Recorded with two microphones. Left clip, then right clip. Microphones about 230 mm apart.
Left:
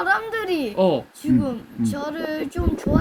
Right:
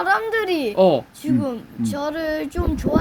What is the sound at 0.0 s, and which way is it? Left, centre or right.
A woman's voice, right.